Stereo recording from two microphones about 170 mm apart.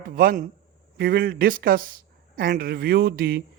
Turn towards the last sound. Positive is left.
turn(degrees=-65)  # may be behind; listen again after turning